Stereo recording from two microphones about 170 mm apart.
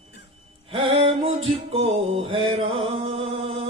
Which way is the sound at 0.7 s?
30° right (ahead or behind).